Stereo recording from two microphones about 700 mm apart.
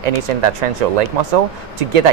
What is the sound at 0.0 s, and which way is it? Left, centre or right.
Speech, right.